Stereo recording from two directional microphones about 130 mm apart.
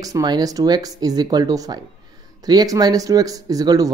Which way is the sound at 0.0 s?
30° right (ahead or behind).